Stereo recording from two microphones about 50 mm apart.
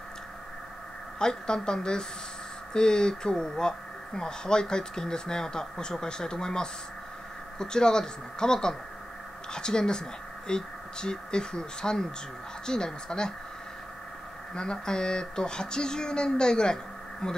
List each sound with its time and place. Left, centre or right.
1.2 s speech: centre
14.5 s speech: centre